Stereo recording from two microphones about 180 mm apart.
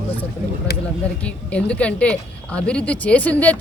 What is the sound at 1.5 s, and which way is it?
A woman's voice, 5° left (ahead or behind).